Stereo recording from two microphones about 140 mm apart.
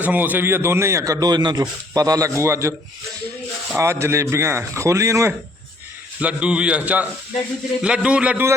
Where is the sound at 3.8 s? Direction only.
20° right (ahead or behind).